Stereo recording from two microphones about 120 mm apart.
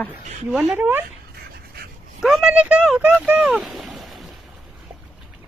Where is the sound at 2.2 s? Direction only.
5° right (ahead or behind).